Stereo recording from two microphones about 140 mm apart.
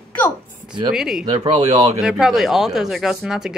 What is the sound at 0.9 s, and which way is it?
Speech, 5° right (ahead or behind).